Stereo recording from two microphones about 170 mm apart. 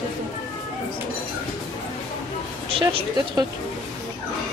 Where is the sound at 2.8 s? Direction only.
30° right (ahead or behind).